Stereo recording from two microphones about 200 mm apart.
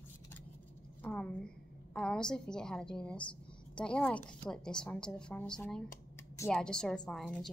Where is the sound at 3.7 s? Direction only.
5° left (ahead or behind).